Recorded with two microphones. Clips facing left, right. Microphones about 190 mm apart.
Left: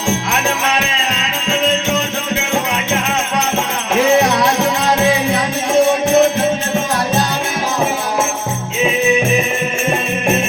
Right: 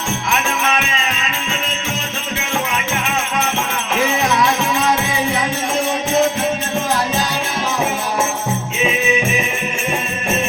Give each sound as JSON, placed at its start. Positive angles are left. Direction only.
{"t": 1.5, "sound": "music", "side_deg": 70}
{"t": 3.9, "sound": "music", "side_deg": 70}